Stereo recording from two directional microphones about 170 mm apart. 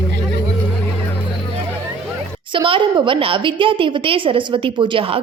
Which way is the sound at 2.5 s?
30° right (ahead or behind).